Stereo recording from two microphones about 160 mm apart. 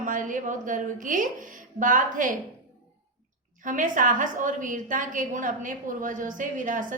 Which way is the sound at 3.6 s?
55° right (ahead or behind).